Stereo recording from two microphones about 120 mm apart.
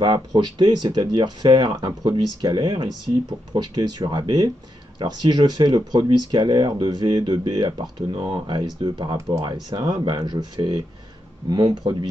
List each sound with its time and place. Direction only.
0.0 s speech: 35° right (ahead or behind)